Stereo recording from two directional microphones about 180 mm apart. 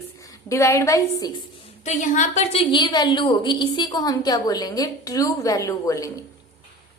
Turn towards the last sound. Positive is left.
turn(degrees=20)  # may be behind; listen again after turning